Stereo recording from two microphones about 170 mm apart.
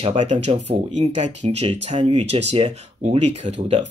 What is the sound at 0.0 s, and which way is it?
Speech, 40° right (ahead or behind).